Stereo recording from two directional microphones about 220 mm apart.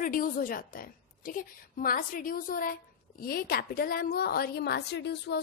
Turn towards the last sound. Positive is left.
turn(degrees=50)  # may be behind; listen again after turning